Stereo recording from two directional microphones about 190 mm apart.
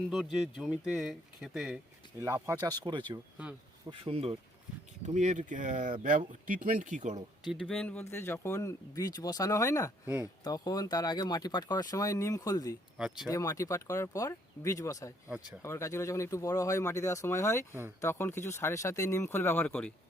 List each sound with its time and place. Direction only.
0.1 s speech: centre (ahead or behind)
2.2 s speech: 15° right (ahead or behind)
3.8 s speech: 30° right (ahead or behind)
7.5 s speech: centre (ahead or behind); by 12.7 s 20° left (ahead or behind)
13.0 s speech: 5° right (ahead or behind)
13.2 s speech: 15° left (ahead or behind)